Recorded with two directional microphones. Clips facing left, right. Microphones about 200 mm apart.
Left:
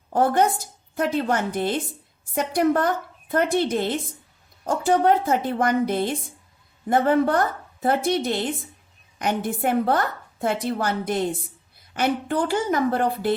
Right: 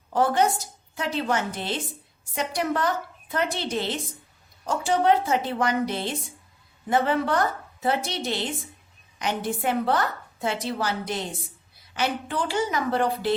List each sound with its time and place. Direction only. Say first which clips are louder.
0.1 s a woman's voice: left 2 dB; 50° left (ahead or behind)